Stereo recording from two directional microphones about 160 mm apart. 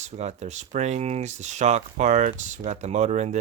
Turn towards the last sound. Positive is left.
turn(degrees=-45)  # may be behind; listen again after turning